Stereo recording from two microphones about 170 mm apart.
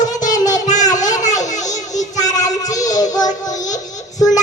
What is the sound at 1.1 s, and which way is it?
Children playing, 45° left (ahead or behind).